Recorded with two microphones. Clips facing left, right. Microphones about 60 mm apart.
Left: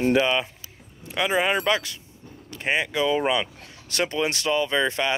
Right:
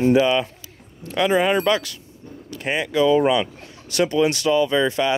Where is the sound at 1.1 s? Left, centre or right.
Centre.